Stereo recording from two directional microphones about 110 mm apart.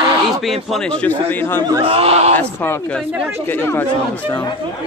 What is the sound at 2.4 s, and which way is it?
Speech, 15° left (ahead or behind).